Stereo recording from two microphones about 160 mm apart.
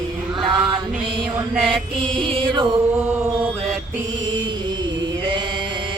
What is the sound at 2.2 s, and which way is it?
Music, 35° right (ahead or behind).